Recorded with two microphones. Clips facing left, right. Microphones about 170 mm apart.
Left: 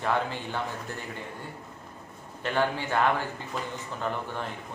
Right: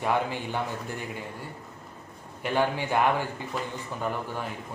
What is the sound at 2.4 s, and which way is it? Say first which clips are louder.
Speech: right 1 dB; 15° right (ahead or behind).